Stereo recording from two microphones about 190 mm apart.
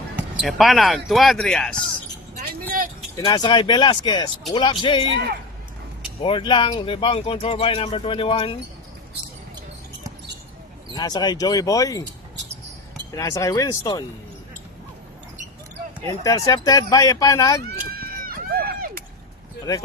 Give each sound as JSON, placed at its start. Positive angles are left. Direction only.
{"t": 0.2, "sound": "speech", "side_deg": 0}
{"t": 3.2, "sound": "speech", "side_deg": 20}
{"t": 5.1, "sound": "a man's voice", "side_deg": -55}
{"t": 6.2, "sound": "speech", "side_deg": 25}
{"t": 10.9, "sound": "speech", "side_deg": 20}
{"t": 13.1, "sound": "speech", "side_deg": 15}
{"t": 16.2, "sound": "speech", "side_deg": 15}
{"t": 17.9, "sound": "run", "side_deg": -50}